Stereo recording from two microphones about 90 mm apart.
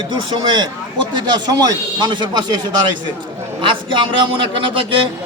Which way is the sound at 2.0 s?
60° right (ahead or behind).